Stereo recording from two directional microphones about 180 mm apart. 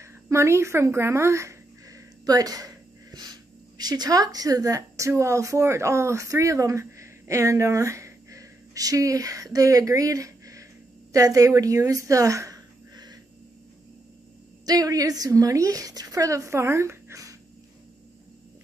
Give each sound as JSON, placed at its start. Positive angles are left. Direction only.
{"t": 0.0, "sound": "speech", "side_deg": -15}
{"t": 14.7, "sound": "a woman's voice", "side_deg": -20}